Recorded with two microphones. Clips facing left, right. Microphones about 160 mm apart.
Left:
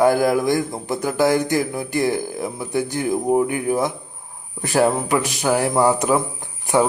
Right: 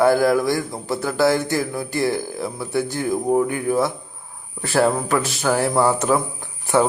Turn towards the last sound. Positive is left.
turn(degrees=15)  # may be behind; listen again after turning